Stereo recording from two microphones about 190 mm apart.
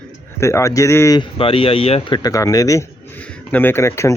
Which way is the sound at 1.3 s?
30° left (ahead or behind).